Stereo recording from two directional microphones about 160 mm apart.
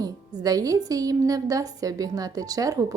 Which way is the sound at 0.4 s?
20° right (ahead or behind).